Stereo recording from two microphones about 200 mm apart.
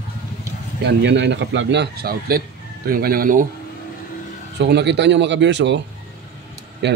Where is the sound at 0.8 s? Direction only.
60° right (ahead or behind).